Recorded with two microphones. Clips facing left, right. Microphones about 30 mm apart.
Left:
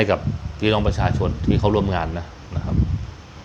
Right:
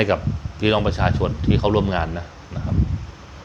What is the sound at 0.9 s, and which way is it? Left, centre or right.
Speech, right.